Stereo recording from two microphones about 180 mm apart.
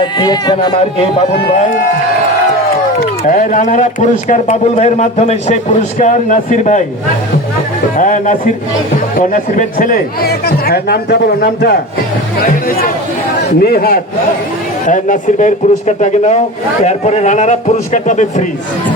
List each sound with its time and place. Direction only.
0.0 s speech: 25° left (ahead or behind)
3.2 s a man's voice: 45° left (ahead or behind)
7.9 s speech: 45° left (ahead or behind)
14.8 s a man's voice: 45° left (ahead or behind)